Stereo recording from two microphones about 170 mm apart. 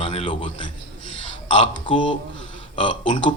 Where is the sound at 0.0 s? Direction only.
35° left (ahead or behind).